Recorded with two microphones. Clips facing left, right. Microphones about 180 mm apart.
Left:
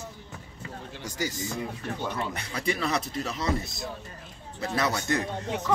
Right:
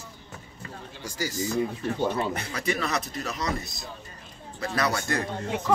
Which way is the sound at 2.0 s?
30° right (ahead or behind).